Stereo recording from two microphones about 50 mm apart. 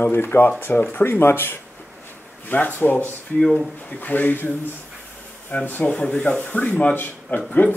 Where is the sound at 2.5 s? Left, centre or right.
Left.